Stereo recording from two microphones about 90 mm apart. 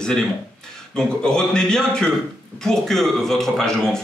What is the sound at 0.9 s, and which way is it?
A man's voice, 10° left (ahead or behind).